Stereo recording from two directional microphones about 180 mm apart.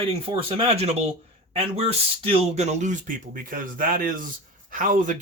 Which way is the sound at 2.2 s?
40° right (ahead or behind).